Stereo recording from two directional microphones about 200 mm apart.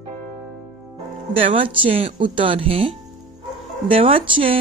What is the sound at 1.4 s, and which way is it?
Speech, 30° right (ahead or behind).